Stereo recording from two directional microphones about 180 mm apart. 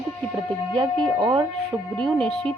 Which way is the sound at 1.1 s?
25° right (ahead or behind).